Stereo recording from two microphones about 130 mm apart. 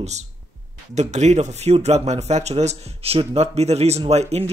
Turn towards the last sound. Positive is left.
turn(degrees=-55)  # may be behind; listen again after turning